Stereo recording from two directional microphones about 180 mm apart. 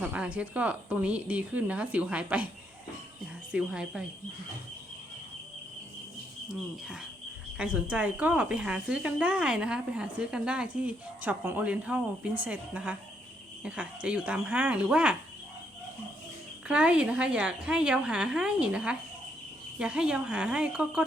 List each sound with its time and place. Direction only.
0.0 s speech: 5° right (ahead or behind)
3.5 s a woman's voice: 5° right (ahead or behind)
6.8 s a woman's voice: 5° right (ahead or behind)
16.6 s a woman's voice: 5° right (ahead or behind)